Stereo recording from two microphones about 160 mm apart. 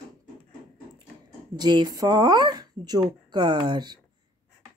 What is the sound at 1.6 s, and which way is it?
Speech, 25° right (ahead or behind).